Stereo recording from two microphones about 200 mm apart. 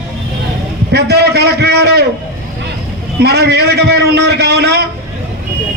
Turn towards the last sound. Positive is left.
turn(degrees=-55)  # may be behind; listen again after turning